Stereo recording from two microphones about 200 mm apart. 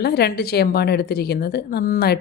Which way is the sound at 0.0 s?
50° left (ahead or behind).